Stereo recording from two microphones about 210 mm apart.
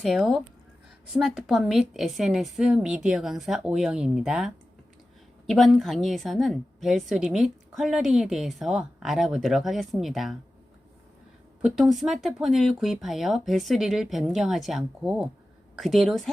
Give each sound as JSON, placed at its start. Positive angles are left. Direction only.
{"t": 0.0, "sound": "speech", "side_deg": 0}
{"t": 11.6, "sound": "speech", "side_deg": 0}